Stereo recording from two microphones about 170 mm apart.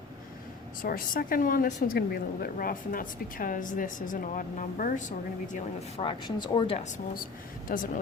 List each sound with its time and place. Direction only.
0.8 s a woman's voice: 55° left (ahead or behind)
6.0 s speech: 30° left (ahead or behind)
6.9 s speech: 55° left (ahead or behind)